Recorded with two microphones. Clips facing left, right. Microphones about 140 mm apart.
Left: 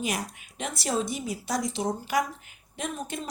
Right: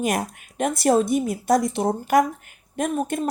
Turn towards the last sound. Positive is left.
turn(degrees=-50)  # may be behind; listen again after turning